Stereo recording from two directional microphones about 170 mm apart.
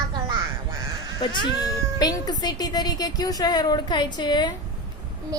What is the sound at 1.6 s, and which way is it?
A woman's voice, 25° left (ahead or behind).